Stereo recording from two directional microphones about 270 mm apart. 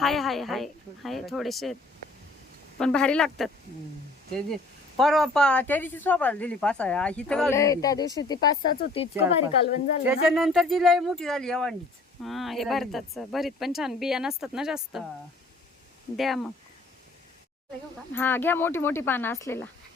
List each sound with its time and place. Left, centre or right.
0.0 s speech: centre
2.7 s speech: centre
10.1 s speech: centre
16.1 s speech: centre
18.1 s speech: centre